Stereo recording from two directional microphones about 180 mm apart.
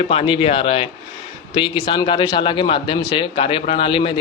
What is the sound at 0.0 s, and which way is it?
A man's voice, 35° left (ahead or behind).